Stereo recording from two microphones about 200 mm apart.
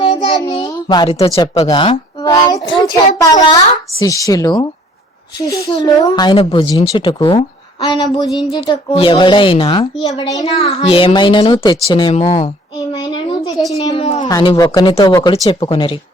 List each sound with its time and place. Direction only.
0.0 s child singing: 20° left (ahead or behind)
0.4 s a sound: 20° left (ahead or behind)
1.4 s a woman's voice: 25° left (ahead or behind)
8.5 s a woman's voice: 25° left (ahead or behind)
10.4 s a woman's voice: 30° left (ahead or behind)
12.9 s a sound: 25° left (ahead or behind)
13.8 s a woman's voice: 25° left (ahead or behind)